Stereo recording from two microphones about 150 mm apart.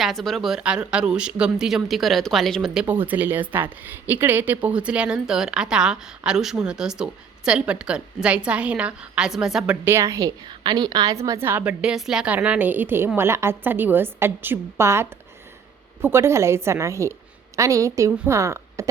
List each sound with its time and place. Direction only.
0.0 s speech: centre (ahead or behind)
2.8 s a woman's voice: 15° right (ahead or behind)
9.8 s a woman's voice: 20° right (ahead or behind)